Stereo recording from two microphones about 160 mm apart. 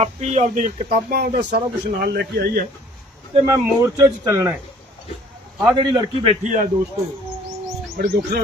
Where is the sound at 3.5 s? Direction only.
20° right (ahead or behind).